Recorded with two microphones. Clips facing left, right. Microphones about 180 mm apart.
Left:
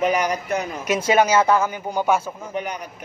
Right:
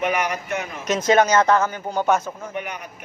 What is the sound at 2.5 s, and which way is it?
Speech, 35° left (ahead or behind).